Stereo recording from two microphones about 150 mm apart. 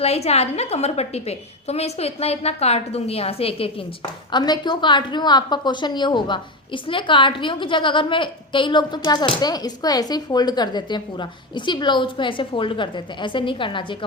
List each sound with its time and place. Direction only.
0.0 s a woman's voice: 45° left (ahead or behind)
4.3 s a woman's voice: 30° left (ahead or behind)